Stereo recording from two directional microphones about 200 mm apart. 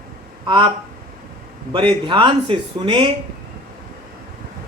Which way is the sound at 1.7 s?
25° right (ahead or behind).